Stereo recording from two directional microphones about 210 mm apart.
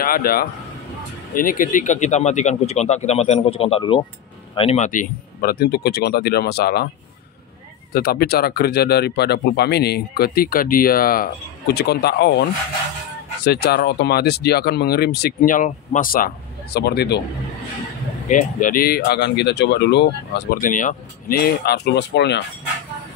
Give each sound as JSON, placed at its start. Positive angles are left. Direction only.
{"t": 0.0, "sound": "speech", "side_deg": 45}
{"t": 7.9, "sound": "speech", "side_deg": 50}
{"t": 13.5, "sound": "speech", "side_deg": 50}
{"t": 18.3, "sound": "speech", "side_deg": 40}